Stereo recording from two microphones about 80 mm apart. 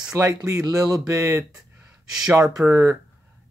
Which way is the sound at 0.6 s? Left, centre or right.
Right.